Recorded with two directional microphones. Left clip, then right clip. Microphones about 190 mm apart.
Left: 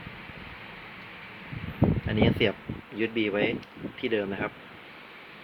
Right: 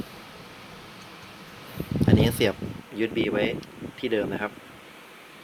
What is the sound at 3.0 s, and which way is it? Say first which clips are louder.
Speech: right 2 dB; 55° right (ahead or behind).